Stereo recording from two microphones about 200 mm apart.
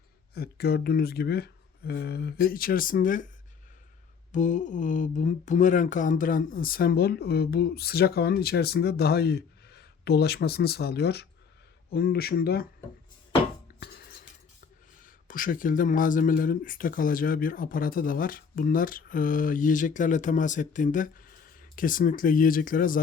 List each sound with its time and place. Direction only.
0.3 s speech: 50° left (ahead or behind)
4.3 s speech: 40° left (ahead or behind)
13.7 s dishes: 50° left (ahead or behind)
15.0 s speech: 45° left (ahead or behind)